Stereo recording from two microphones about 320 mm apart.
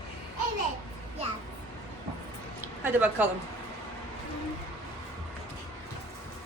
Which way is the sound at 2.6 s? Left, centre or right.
Centre.